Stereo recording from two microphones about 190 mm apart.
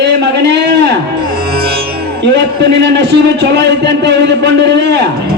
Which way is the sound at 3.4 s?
65° right (ahead or behind).